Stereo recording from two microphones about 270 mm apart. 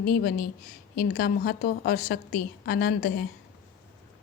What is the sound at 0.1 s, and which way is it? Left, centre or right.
A woman's voice, left.